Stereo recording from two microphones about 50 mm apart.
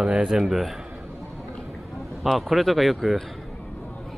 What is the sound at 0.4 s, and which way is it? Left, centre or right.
Speech, centre.